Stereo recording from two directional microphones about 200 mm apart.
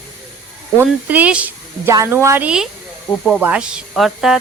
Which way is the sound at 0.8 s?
10° right (ahead or behind).